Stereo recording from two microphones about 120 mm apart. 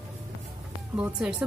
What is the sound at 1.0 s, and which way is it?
Speech, 10° right (ahead or behind).